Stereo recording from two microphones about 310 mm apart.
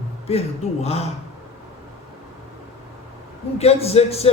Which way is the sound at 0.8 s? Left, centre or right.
Centre.